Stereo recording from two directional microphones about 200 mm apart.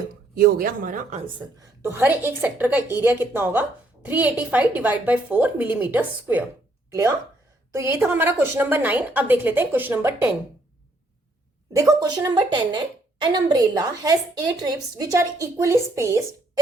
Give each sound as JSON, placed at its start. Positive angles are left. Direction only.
{"t": 0.3, "sound": "speech", "side_deg": -45}
{"t": 1.8, "sound": "a woman's voice", "side_deg": -10}
{"t": 7.7, "sound": "a woman's voice", "side_deg": -10}
{"t": 11.7, "sound": "a woman's voice", "side_deg": -15}